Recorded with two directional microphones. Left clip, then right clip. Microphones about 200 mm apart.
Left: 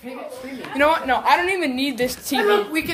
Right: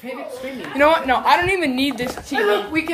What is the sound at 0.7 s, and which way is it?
Speech, 5° right (ahead or behind).